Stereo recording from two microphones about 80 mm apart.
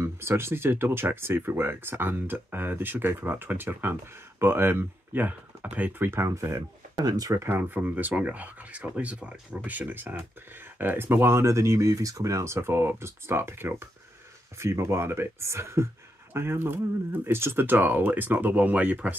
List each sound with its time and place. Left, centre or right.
0.0 s speech: right
7.3 s speech: right